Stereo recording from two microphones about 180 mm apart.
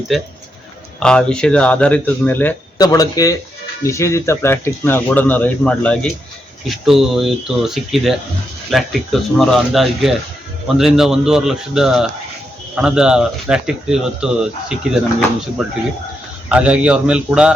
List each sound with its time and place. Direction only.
0.1 s speech: centre (ahead or behind)
2.7 s speech: 20° left (ahead or behind); by 14.9 s 5° right (ahead or behind)
16.5 s speech: 5° right (ahead or behind)